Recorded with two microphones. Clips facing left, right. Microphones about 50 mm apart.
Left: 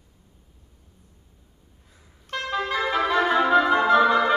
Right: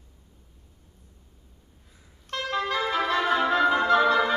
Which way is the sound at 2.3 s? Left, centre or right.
Centre.